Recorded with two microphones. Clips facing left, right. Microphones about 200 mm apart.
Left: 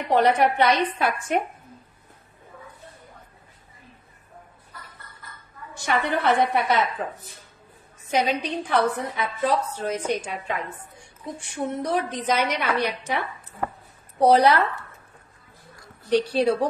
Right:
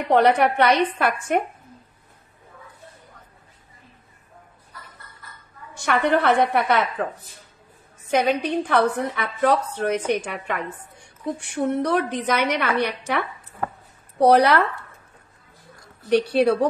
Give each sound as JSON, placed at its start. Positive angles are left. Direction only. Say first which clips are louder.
{"t": 0.1, "sound": "a woman's voice", "louder": "right 2 dB", "side_deg": -60}
{"t": 5.8, "sound": "a woman's voice", "louder": "right 4 dB", "side_deg": -60}
{"t": 8.1, "sound": "a woman's voice", "louder": "right 3 dB", "side_deg": -55}
{"t": 14.2, "sound": "a woman's voice", "louder": "right 1 dB", "side_deg": -65}
{"t": 16.1, "sound": "a woman's voice", "louder": "right 2 dB", "side_deg": -65}